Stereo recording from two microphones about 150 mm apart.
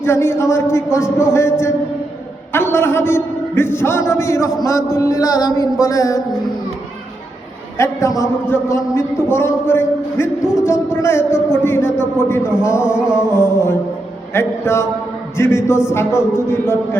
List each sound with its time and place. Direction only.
0.0 s a man's voice: 15° left (ahead or behind)
4.9 s music: 20° left (ahead or behind)
7.8 s a man's voice: 20° left (ahead or behind)
10.4 s speech: 5° right (ahead or behind)
10.7 s a man's voice: 15° left (ahead or behind)
12.9 s music: 5° right (ahead or behind)
13.3 s a man's voice: 15° left (ahead or behind)